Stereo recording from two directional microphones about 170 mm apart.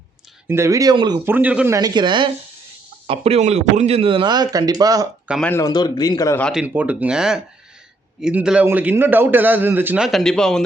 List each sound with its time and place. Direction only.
0.4 s a man's voice: 15° right (ahead or behind)
1.2 s a man's voice: 10° right (ahead or behind); by 2.3 s 25° right (ahead or behind)
3.1 s a man's voice: 40° right (ahead or behind); by 5.0 s 20° right (ahead or behind)
5.5 s a man's voice: 20° left (ahead or behind)
6.4 s a man's voice: 5° right (ahead or behind)